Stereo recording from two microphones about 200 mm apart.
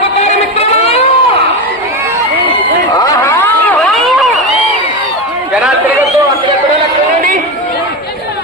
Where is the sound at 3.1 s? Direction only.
10° left (ahead or behind).